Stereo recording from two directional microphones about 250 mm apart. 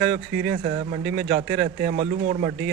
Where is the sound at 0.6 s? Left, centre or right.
Right.